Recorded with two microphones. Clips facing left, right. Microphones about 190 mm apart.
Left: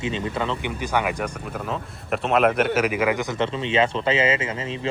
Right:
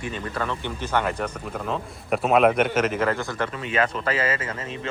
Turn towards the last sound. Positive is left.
turn(degrees=90)